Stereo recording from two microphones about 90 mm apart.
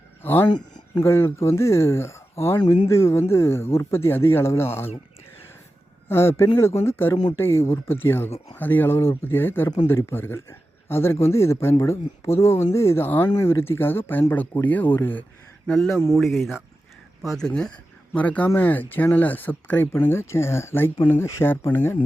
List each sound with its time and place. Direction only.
0.2 s speech: 20° left (ahead or behind)
0.4 s a sound: 55° left (ahead or behind)
1.0 s speech: 30° left (ahead or behind)
6.1 s speech: 30° left (ahead or behind)
13.1 s speech: 20° left (ahead or behind)
15.6 s speech: centre (ahead or behind); by 21.9 s 30° left (ahead or behind)